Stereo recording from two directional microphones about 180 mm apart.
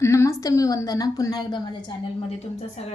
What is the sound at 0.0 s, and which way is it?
A woman's voice, 15° left (ahead or behind).